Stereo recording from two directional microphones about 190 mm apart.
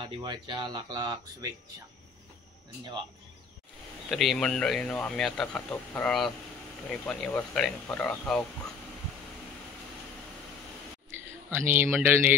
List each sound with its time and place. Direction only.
0.0 s speech: 25° right (ahead or behind)
4.1 s speech: centre (ahead or behind)
11.5 s speech: 10° right (ahead or behind)